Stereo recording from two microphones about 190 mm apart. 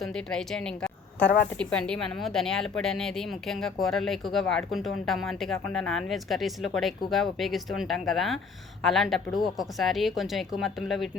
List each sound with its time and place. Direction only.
0.0 s a woman's voice: 5° left (ahead or behind)
1.2 s a woman's voice: 50° left (ahead or behind)
1.5 s a woman's voice: 5° left (ahead or behind)